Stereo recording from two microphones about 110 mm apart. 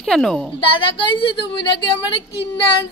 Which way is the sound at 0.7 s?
50° left (ahead or behind).